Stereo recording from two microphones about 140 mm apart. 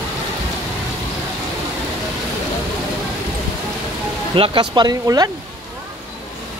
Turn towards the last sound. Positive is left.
turn(degrees=-30)  # may be behind; listen again after turning